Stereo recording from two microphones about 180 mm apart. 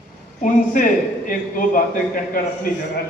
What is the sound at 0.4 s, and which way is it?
A man's voice, 45° left (ahead or behind).